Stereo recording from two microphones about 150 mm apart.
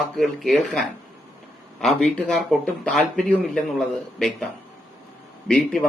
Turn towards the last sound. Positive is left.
turn(degrees=5)  # may be behind; listen again after turning